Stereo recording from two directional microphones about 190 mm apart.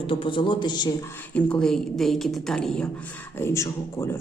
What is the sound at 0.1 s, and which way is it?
Speech, 25° left (ahead or behind).